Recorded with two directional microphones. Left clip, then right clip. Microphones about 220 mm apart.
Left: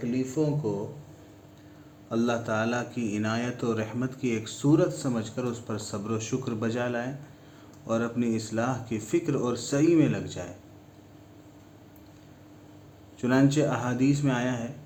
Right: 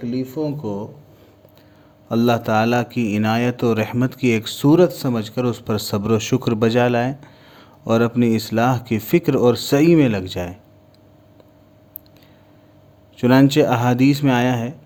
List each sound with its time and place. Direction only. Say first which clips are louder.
0.0 s a man's voice: right 4 dB; 45° right (ahead or behind)
2.0 s a man's voice: right 10 dB; 50° right (ahead or behind)
13.1 s a man's voice: right 10 dB; 50° right (ahead or behind)